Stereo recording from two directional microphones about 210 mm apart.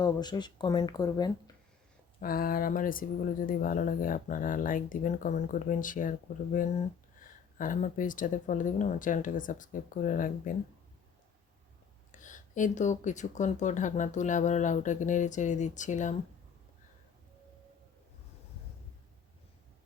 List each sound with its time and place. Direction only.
0.0 s speech: 20° left (ahead or behind)
2.2 s speech: 45° left (ahead or behind)
12.1 s speech: 35° left (ahead or behind)